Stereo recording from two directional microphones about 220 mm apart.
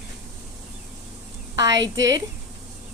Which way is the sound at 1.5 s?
15° right (ahead or behind).